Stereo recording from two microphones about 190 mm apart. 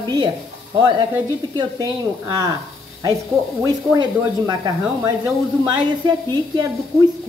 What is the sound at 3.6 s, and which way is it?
Speech, 20° right (ahead or behind).